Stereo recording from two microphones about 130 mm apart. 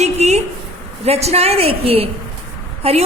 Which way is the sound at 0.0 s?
55° right (ahead or behind).